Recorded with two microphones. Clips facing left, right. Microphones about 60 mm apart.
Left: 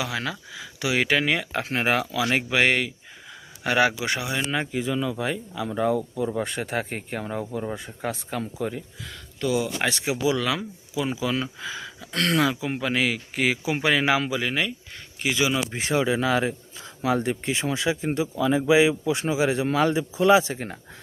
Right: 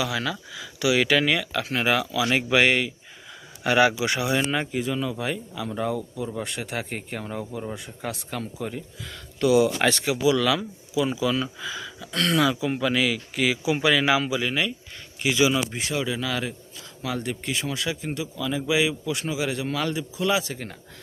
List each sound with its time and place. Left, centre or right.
0.0 s speech: left
4.5 s speech: centre
5.5 s speech: left
6.9 s speech: centre
8.0 s speech: left
9.8 s speech: centre
10.1 s speech: left